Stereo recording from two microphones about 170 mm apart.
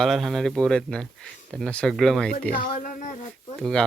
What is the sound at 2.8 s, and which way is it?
Child singing, 50° left (ahead or behind).